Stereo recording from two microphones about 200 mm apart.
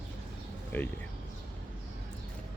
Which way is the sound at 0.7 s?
10° left (ahead or behind).